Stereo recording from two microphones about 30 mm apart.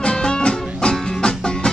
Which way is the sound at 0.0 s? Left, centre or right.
Left.